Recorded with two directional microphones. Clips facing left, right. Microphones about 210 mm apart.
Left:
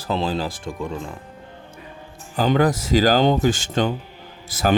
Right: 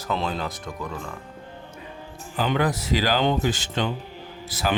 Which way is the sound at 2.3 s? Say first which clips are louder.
Left 5 dB; 40° left (ahead or behind).